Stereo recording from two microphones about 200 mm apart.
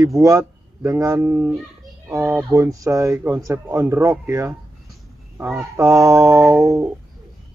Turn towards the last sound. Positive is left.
turn(degrees=-15)  # may be behind; listen again after turning